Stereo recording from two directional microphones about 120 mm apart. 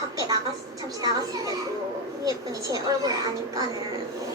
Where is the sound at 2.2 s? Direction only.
30° right (ahead or behind).